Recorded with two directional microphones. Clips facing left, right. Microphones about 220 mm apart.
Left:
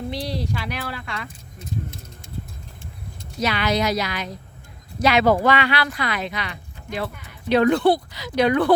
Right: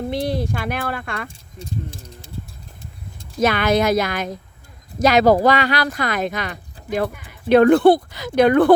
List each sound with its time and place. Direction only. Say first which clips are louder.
0.1 s speech: right 5 dB; 50° right (ahead or behind)
1.3 s speech: right 1 dB; 30° right (ahead or behind)
3.4 s speech: right 5 dB; 50° right (ahead or behind)